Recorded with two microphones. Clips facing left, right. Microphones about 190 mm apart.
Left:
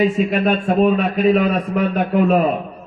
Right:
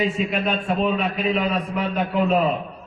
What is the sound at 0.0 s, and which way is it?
A man's voice, 45° left (ahead or behind).